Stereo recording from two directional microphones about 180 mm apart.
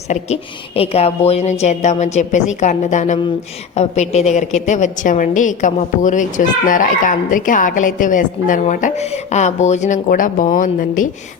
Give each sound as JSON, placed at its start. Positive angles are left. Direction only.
{"t": 0.1, "sound": "a woman's voice", "side_deg": 35}